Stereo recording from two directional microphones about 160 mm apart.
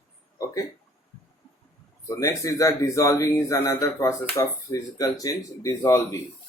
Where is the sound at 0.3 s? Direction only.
20° left (ahead or behind).